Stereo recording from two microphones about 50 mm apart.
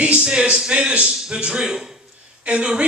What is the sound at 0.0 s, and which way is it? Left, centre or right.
A man's voice, centre.